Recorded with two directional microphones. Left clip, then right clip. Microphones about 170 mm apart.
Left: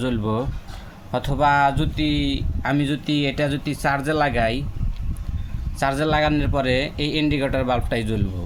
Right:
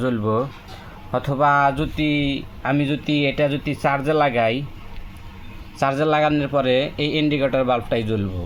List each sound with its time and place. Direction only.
0.0 s speech: 20° right (ahead or behind)
6.0 s speech: 15° right (ahead or behind)